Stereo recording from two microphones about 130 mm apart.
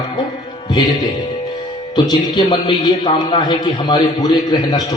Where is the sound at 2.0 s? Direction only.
35° left (ahead or behind).